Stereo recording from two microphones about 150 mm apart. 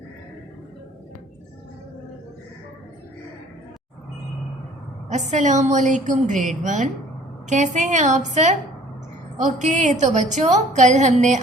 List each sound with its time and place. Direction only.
5.0 s a woman's voice: 50° right (ahead or behind)
9.6 s a woman's voice: 55° right (ahead or behind)